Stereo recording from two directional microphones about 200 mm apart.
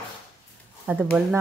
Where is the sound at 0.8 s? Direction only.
5° right (ahead or behind).